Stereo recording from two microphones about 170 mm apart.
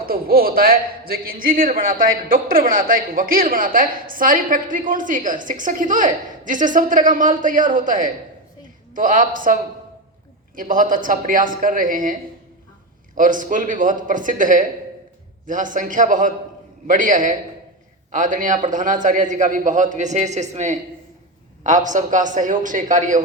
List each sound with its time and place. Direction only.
0.0 s a man's voice: 60° right (ahead or behind)
13.1 s a man's voice: 50° right (ahead or behind)